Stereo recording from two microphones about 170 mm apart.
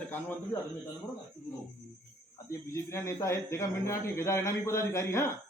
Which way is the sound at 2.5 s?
15° left (ahead or behind).